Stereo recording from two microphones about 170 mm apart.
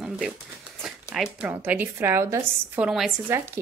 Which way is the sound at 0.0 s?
5° right (ahead or behind).